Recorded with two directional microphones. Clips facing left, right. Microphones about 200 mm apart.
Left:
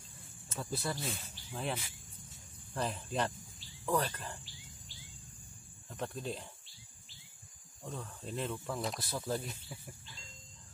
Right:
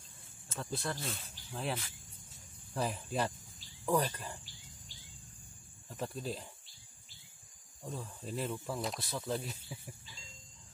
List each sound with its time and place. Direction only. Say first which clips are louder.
0.6 s speech: left 1 dB; 5° left (ahead or behind)
5.9 s speech: even; centre (ahead or behind)
7.9 s speech: right 1 dB; centre (ahead or behind)